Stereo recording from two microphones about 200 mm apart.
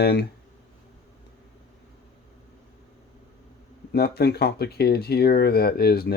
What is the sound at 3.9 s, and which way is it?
Speech, 50° left (ahead or behind).